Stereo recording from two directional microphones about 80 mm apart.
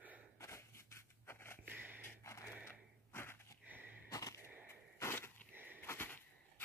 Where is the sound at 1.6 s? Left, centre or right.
Right.